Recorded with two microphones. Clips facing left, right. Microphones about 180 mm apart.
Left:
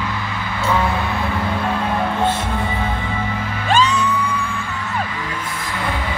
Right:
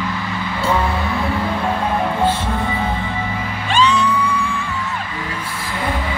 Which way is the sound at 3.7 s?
45° left (ahead or behind).